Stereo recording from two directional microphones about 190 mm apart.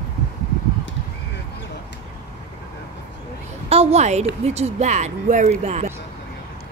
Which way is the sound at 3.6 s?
35° right (ahead or behind).